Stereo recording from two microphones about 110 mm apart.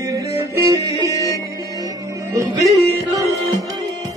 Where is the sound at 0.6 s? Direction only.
30° right (ahead or behind).